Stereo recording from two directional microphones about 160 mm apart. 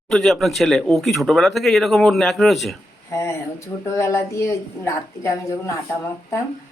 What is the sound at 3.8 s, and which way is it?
A woman's voice, 15° left (ahead or behind).